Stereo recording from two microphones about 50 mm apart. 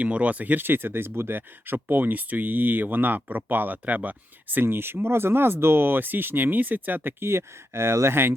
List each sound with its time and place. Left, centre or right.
0.0 s speech: right
4.6 s speech: right